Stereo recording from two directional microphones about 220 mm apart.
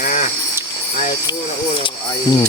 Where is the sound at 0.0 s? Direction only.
35° left (ahead or behind).